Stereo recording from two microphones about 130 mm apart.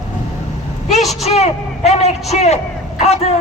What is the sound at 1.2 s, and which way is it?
A man's voice, 55° left (ahead or behind).